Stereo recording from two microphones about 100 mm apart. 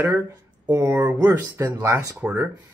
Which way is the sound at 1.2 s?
35° right (ahead or behind).